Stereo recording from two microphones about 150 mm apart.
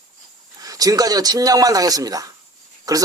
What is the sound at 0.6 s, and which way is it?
Speech, 25° right (ahead or behind).